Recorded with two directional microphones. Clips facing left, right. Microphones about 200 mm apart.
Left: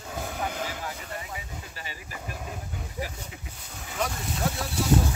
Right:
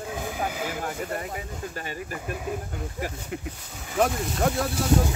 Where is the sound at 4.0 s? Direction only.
50° right (ahead or behind).